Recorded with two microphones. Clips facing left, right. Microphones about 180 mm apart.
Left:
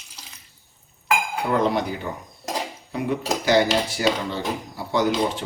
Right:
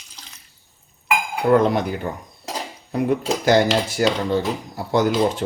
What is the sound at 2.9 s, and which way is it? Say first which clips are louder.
Speech: right 4 dB; 45° right (ahead or behind).